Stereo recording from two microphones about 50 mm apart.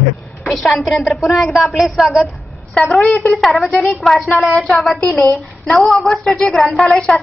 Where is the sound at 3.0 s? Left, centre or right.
Left.